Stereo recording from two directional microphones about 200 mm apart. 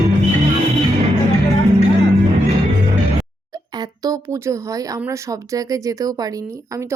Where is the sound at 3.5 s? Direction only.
20° right (ahead or behind).